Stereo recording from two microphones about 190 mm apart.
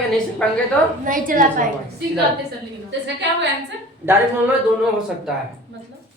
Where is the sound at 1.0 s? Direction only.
45° right (ahead or behind).